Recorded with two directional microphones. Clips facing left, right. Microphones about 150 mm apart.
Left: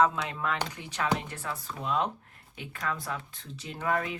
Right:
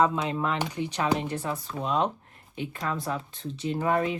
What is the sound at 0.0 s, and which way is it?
Speech, 25° right (ahead or behind).